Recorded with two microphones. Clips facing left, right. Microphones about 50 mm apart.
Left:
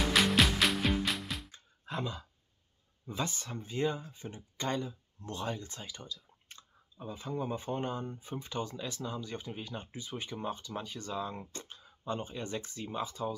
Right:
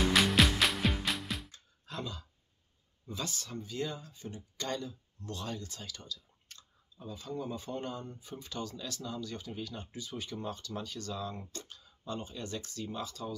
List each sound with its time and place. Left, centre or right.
0.1 s music: centre
1.5 s music: left
3.1 s speech: left